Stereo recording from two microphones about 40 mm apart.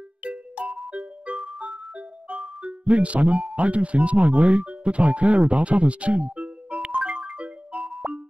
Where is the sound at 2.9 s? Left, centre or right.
Right.